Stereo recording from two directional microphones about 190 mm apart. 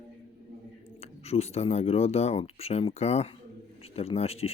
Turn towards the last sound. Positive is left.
turn(degrees=30)  # may be behind; listen again after turning